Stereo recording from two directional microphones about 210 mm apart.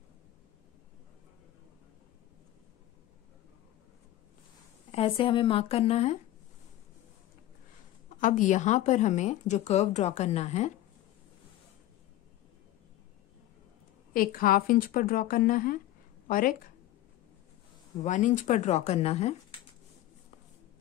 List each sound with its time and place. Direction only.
4.9 s speech: 25° left (ahead or behind)
8.2 s a woman's voice: 40° left (ahead or behind)
14.1 s a woman's voice: 45° left (ahead or behind)
18.0 s a woman's voice: 35° left (ahead or behind)